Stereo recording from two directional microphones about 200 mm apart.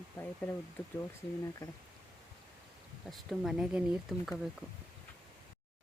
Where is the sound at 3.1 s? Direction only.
Centre (ahead or behind).